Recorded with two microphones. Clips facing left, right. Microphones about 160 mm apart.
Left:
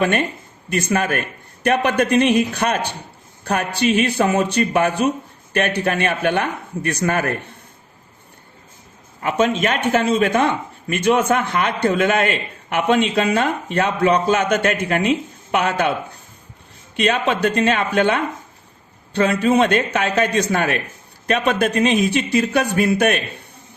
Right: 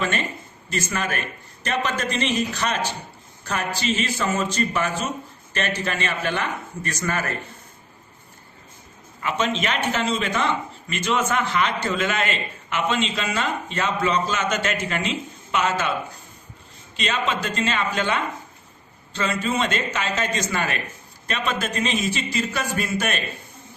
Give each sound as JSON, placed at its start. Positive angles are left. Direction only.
{"t": 0.0, "sound": "a man's voice", "side_deg": 55}
{"t": 9.2, "sound": "a man's voice", "side_deg": 50}
{"t": 17.0, "sound": "a man's voice", "side_deg": 60}